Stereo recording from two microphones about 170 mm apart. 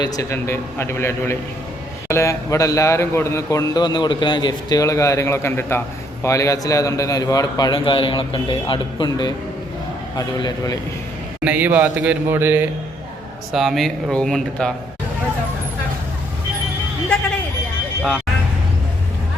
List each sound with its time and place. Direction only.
0.0 s a man's voice: 20° left (ahead or behind)
11.4 s a man's voice: 10° right (ahead or behind)
13.5 s speech: centre (ahead or behind)